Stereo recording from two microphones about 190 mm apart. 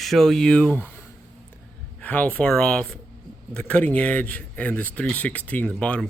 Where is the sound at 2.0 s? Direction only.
10° left (ahead or behind).